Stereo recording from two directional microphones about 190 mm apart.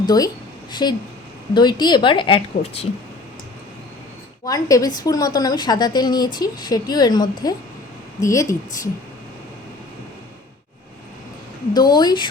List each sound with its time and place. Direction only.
0.0 s a woman's voice: 20° left (ahead or behind)
4.4 s a woman's voice: 20° left (ahead or behind)
11.7 s a woman's voice: 20° left (ahead or behind)